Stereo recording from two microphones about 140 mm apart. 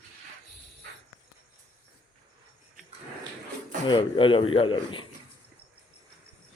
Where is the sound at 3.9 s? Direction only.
35° left (ahead or behind).